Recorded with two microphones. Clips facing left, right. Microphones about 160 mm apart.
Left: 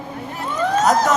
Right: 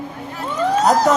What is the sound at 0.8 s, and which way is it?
Speech, 35° right (ahead or behind).